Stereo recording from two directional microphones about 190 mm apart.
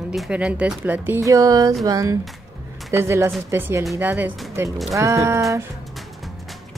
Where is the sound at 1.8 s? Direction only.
20° right (ahead or behind).